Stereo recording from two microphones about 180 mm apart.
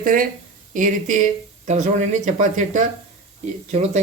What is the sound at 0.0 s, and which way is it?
Speech, 50° right (ahead or behind).